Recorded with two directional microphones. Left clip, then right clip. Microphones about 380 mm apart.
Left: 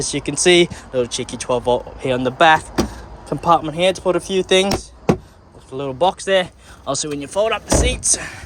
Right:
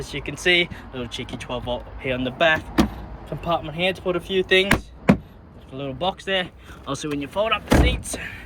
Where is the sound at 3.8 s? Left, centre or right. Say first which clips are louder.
Left 6 dB; left.